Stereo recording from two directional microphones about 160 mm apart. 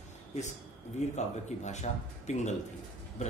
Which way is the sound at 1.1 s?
45° left (ahead or behind).